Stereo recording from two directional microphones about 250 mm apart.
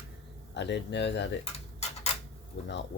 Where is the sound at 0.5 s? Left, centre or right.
Left.